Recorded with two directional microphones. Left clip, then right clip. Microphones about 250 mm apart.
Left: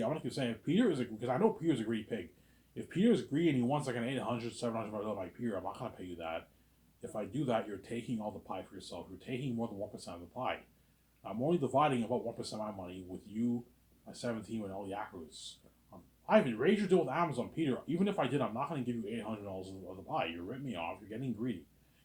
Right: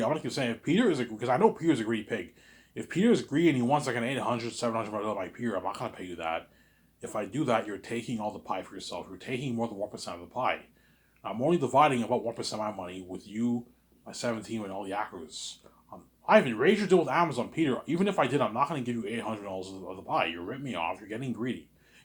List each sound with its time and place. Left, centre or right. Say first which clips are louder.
0.0 s speech: right 7 dB; right